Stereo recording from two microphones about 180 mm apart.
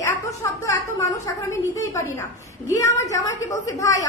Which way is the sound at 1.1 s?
20° left (ahead or behind).